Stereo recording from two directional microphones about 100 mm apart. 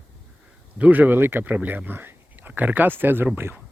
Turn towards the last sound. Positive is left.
turn(degrees=-20)  # may be behind; listen again after turning